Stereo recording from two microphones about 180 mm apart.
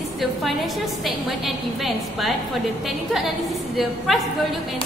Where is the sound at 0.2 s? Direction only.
Centre (ahead or behind).